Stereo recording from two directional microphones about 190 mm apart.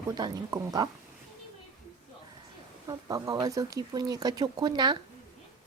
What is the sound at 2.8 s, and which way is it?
Speech, 20° right (ahead or behind).